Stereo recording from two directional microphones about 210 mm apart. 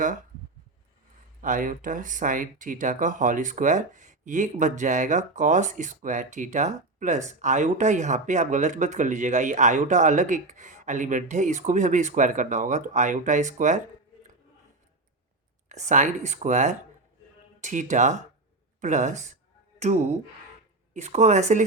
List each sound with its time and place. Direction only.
1.4 s speech: 40° right (ahead or behind)
15.7 s speech: 35° right (ahead or behind)